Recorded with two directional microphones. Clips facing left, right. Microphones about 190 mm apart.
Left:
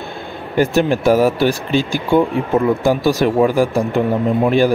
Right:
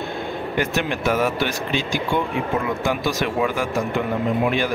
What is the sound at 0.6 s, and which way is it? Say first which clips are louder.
Speech: left 10 dB; 35° left (ahead or behind).